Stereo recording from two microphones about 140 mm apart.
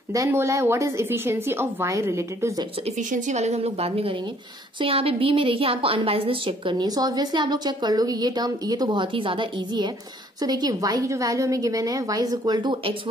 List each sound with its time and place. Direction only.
0.1 s a woman's voice: 20° right (ahead or behind)
3.0 s a woman's voice: 65° right (ahead or behind); by 12.9 s 30° right (ahead or behind)